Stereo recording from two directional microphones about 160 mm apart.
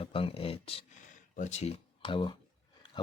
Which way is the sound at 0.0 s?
35° left (ahead or behind).